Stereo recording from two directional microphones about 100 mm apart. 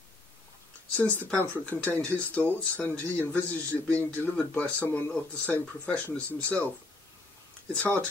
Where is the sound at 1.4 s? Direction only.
20° left (ahead or behind).